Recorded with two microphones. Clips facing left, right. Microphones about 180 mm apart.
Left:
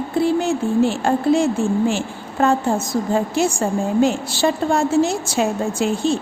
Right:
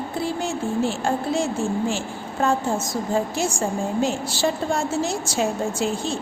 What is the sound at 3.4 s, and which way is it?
A woman's voice, 60° left (ahead or behind).